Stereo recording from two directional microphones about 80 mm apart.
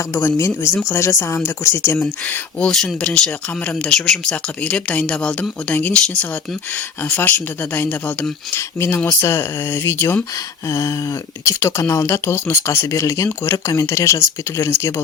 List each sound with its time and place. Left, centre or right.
0.1 s speech: left
2.6 s speech: centre
8.5 s speech: left
10.3 s speech: left